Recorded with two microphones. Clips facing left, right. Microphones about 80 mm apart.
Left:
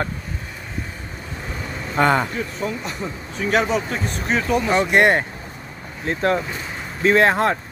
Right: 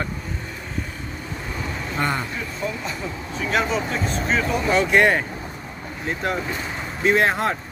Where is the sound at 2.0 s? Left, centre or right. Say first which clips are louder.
Left 8 dB; left.